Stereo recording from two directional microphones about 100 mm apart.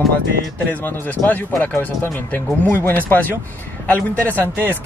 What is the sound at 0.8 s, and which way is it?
A man's voice, 15° left (ahead or behind).